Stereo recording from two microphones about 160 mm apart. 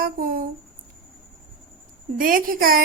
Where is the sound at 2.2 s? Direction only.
60° right (ahead or behind).